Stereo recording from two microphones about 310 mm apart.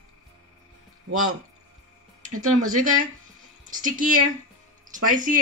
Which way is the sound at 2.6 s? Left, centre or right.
Right.